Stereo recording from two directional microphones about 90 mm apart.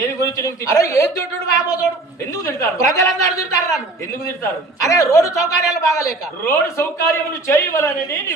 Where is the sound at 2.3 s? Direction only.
35° left (ahead or behind).